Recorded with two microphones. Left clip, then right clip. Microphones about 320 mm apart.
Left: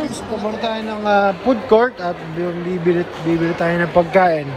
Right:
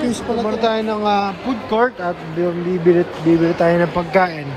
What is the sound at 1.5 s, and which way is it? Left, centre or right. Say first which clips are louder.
Speech: left 4 dB; centre.